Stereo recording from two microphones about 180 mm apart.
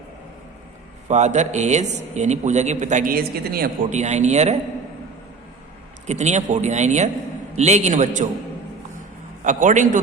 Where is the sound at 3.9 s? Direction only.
40° right (ahead or behind).